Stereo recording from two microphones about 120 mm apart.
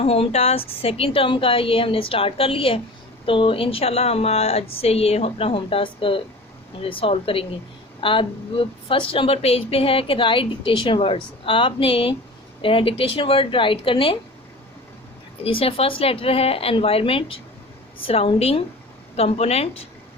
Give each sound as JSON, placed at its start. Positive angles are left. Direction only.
{"t": 0.0, "sound": "a woman's voice", "side_deg": 55}
{"t": 15.4, "sound": "a woman's voice", "side_deg": 50}